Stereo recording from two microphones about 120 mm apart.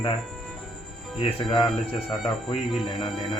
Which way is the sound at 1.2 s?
45° left (ahead or behind).